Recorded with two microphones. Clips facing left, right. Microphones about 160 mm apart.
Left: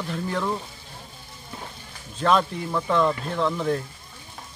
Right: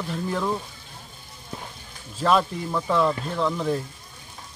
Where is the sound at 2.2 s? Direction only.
5° right (ahead or behind).